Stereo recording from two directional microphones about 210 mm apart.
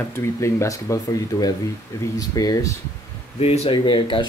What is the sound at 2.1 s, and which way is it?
Speech, 15° left (ahead or behind).